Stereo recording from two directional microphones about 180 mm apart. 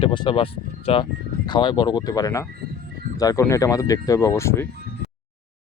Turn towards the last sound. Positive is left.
turn(degrees=15)  # may be behind; listen again after turning